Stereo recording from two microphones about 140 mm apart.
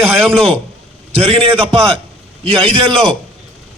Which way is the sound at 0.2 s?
40° right (ahead or behind).